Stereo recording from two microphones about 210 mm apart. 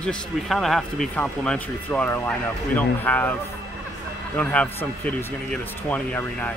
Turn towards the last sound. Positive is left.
turn(degrees=5)  # may be behind; listen again after turning